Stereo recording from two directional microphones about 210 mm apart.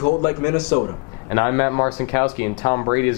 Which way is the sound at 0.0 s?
25° left (ahead or behind).